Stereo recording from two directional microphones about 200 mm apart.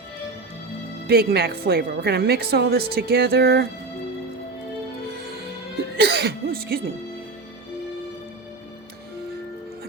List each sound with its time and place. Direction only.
1.0 s a woman's voice: 50° right (ahead or behind)
6.0 s speech: 55° right (ahead or behind)